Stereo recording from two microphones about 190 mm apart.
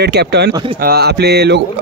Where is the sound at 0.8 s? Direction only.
55° right (ahead or behind).